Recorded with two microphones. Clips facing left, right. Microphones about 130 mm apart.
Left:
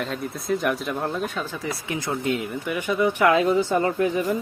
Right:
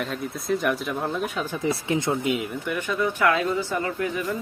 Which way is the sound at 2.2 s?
10° right (ahead or behind).